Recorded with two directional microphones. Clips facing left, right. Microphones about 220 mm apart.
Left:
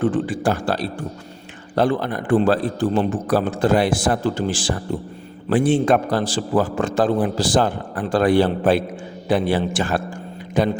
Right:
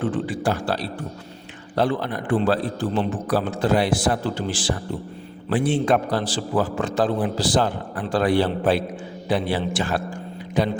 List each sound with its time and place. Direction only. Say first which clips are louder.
0.0 s a man's voice: left 4 dB; 45° left (ahead or behind)